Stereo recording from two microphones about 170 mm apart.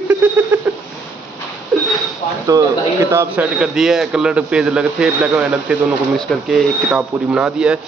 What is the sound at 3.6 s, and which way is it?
Speech, centre (ahead or behind).